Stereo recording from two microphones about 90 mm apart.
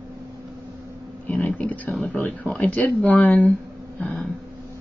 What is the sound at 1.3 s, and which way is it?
Speech, 15° left (ahead or behind).